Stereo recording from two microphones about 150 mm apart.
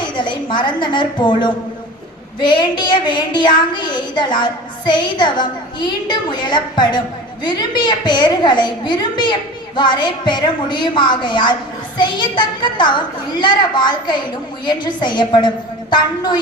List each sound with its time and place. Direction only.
0.0 s a woman's voice: 30° left (ahead or behind)